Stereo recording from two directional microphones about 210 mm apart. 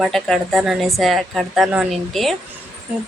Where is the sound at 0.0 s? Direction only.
Centre (ahead or behind).